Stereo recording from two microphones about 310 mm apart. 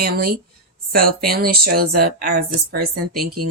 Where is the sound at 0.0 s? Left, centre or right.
Right.